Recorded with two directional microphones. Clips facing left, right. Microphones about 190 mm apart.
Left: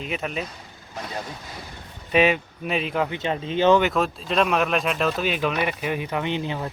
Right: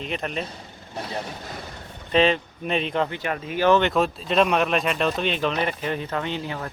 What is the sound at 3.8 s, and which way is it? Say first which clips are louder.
Speech: right 1 dB; 5° left (ahead or behind).